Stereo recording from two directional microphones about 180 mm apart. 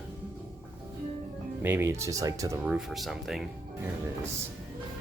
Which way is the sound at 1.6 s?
15° right (ahead or behind).